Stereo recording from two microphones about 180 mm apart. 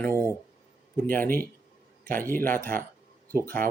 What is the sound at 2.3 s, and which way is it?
Speech, 10° left (ahead or behind).